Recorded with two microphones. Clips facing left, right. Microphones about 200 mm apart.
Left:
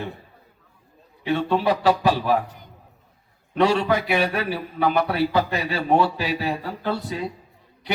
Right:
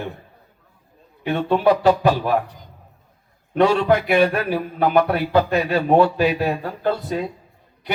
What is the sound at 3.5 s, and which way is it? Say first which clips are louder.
A man's voice: right 3 dB; 55° right (ahead or behind).